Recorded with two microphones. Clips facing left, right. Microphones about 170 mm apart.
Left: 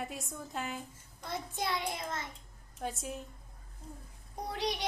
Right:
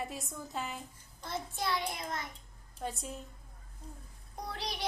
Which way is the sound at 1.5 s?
20° left (ahead or behind).